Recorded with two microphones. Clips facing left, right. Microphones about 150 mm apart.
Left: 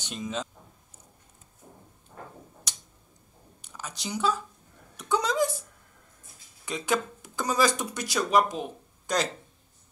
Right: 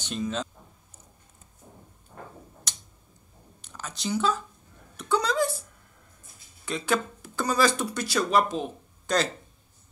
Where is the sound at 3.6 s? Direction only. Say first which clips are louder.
Right 5 dB; 10° left (ahead or behind).